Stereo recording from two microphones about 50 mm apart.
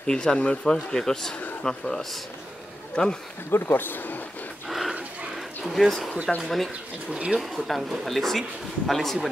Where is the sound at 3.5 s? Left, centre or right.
Left.